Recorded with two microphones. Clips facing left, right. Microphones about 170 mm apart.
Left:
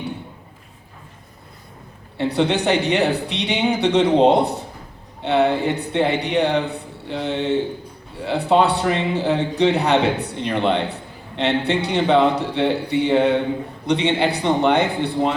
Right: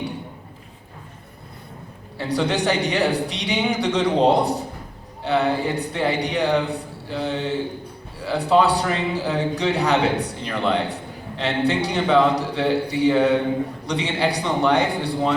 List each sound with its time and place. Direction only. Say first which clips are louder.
2.1 s a man's voice: left 3 dB; 25° left (ahead or behind)